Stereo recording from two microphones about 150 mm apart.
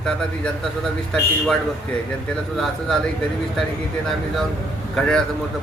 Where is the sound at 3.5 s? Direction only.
Centre (ahead or behind).